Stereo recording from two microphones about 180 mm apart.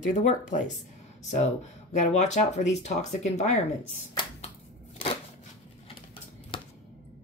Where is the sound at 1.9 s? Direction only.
40° left (ahead or behind).